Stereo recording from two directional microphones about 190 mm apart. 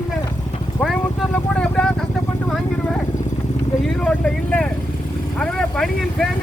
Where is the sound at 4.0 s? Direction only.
5° left (ahead or behind).